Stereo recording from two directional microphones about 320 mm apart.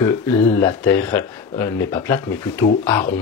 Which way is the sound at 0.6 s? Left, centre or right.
Centre.